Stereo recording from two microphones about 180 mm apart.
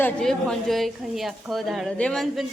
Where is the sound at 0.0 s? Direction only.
5° left (ahead or behind).